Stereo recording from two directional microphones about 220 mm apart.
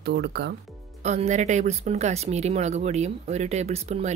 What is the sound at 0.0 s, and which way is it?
Speech, 50° right (ahead or behind).